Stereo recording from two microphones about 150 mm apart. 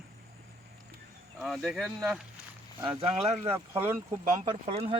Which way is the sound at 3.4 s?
15° right (ahead or behind).